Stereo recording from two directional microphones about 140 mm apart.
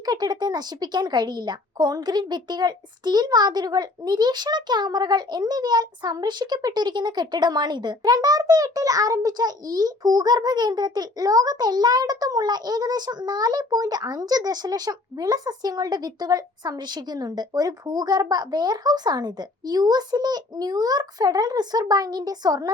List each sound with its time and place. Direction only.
0.0 s speech: 30° right (ahead or behind)